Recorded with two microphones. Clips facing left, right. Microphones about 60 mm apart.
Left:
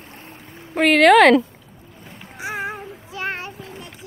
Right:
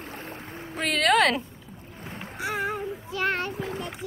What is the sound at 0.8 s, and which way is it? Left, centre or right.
Speech, left.